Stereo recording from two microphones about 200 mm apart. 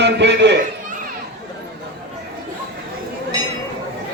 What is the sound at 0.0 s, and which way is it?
Speech, 60° right (ahead or behind).